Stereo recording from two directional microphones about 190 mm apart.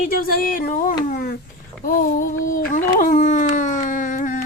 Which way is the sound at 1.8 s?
50° left (ahead or behind).